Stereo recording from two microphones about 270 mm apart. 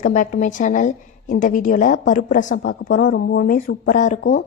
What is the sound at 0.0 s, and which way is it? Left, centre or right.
A woman's voice, left.